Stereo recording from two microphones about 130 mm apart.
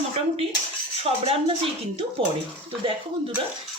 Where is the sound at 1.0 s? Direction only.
50° right (ahead or behind).